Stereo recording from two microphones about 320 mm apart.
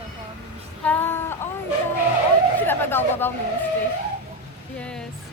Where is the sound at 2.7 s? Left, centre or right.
Centre.